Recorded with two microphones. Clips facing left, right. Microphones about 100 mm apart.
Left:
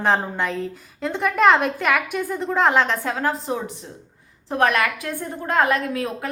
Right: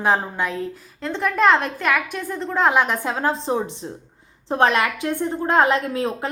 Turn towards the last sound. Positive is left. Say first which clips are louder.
# right 2 dB
turn(degrees=-30)  # may be behind; listen again after turning